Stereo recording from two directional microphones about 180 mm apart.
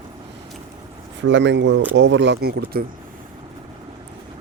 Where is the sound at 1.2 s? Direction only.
85° right; by 2.8 s 60° right (ahead or behind).